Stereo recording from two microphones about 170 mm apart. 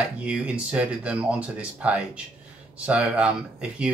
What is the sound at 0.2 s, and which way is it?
Speech, 5° right (ahead or behind).